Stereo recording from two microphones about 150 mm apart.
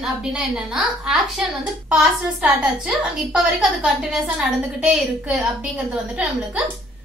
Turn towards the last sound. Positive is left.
turn(degrees=-5)  # may be behind; listen again after turning